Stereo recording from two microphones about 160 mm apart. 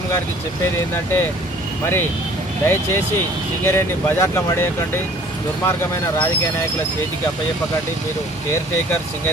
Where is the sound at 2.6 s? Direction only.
15° left (ahead or behind).